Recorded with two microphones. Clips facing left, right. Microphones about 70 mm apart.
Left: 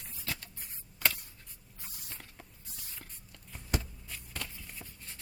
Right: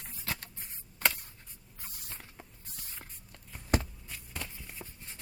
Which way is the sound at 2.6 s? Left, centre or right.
Right.